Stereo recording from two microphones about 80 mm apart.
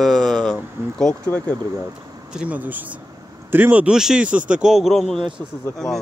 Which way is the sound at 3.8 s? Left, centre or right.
Centre.